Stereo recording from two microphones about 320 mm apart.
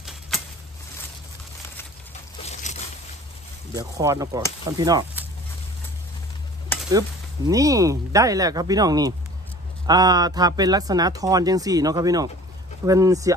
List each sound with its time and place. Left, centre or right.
2.4 s zipper: left
3.7 s speech: centre
6.9 s speech: centre